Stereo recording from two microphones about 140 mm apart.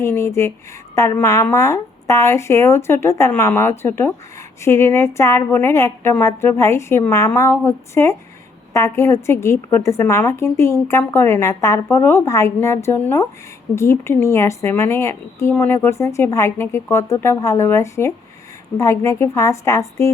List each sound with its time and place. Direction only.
0.0 s a woman's voice: 20° left (ahead or behind)